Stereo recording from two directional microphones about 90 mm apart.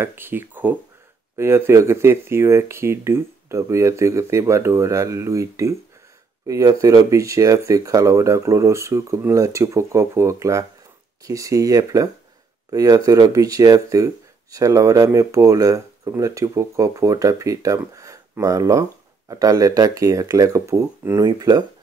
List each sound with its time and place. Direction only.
0.0 s speech: 25° right (ahead or behind)
21.2 s speech: 45° right (ahead or behind)